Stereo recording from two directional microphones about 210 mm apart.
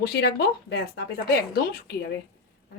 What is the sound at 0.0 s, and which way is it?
Speech, 50° left (ahead or behind).